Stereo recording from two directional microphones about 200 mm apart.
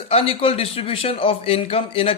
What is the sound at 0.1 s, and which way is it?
A man's voice, 30° left (ahead or behind).